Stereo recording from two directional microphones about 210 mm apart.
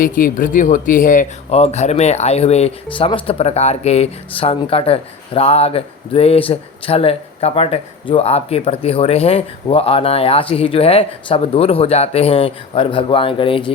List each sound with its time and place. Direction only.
0.0 s speech: 40° left (ahead or behind); by 13.7 s 25° left (ahead or behind)